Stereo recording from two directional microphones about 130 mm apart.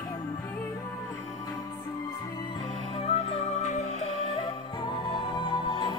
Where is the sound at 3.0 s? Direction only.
50° left (ahead or behind).